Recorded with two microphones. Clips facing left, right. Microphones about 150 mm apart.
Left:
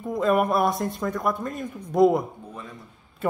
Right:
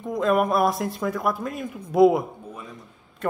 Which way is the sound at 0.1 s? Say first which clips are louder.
Even; centre (ahead or behind).